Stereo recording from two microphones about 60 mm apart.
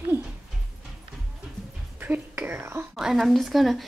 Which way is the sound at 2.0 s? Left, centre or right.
Right.